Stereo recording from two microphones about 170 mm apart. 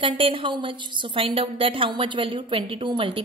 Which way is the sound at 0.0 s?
30° right (ahead or behind).